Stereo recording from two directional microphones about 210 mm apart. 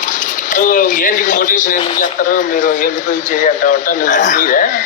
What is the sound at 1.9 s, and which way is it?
Speech, 35° left (ahead or behind).